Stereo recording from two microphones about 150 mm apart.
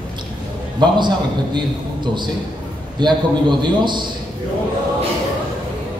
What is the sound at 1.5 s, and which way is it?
A man's voice, 30° right (ahead or behind).